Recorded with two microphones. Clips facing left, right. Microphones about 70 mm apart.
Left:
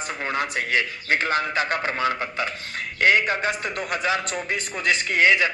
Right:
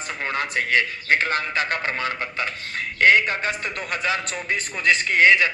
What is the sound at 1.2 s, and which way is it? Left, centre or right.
A man's voice, left.